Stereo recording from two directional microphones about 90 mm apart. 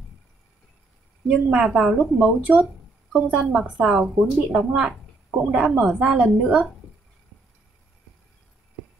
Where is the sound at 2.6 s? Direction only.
Centre (ahead or behind).